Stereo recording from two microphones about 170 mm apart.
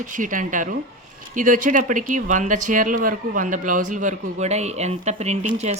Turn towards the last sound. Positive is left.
turn(degrees=-40)  # may be behind; listen again after turning